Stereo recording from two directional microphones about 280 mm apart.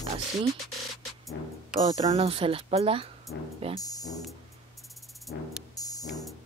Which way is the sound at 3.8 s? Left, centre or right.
Centre.